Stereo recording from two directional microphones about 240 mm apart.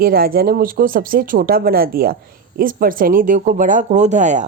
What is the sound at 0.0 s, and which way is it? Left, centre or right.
A woman's voice, right.